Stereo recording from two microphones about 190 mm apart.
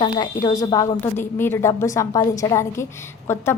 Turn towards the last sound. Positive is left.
turn(degrees=15)  # may be behind; listen again after turning